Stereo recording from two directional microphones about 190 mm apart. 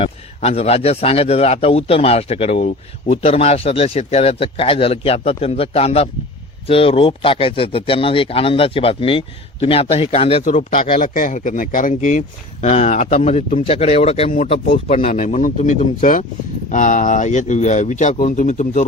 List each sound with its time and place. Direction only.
0.0 s a man's voice: 35° left (ahead or behind)
10.4 s a man's voice: 40° left (ahead or behind)